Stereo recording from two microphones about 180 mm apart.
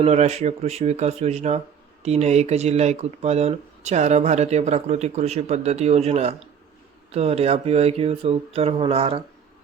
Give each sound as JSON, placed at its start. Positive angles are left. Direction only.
{"t": 0.0, "sound": "speech", "side_deg": -40}